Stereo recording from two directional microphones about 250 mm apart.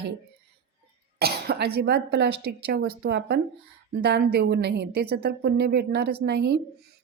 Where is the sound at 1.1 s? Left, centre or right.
Right.